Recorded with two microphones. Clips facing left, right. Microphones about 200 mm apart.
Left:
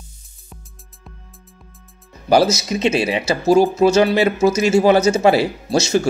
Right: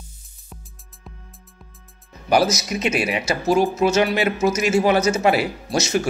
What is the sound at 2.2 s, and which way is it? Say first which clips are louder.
Speech: left 4 dB; 30° left (ahead or behind).